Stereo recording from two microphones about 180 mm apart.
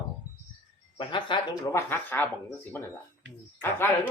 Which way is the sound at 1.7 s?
10° left (ahead or behind).